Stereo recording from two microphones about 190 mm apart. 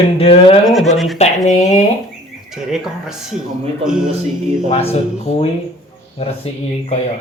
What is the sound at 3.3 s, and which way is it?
Speech, 5° right (ahead or behind).